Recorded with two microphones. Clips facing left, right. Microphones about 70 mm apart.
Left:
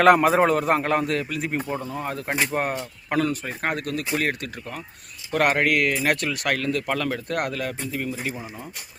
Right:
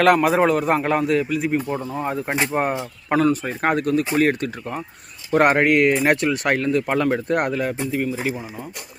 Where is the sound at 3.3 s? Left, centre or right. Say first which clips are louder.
Right 6 dB; right.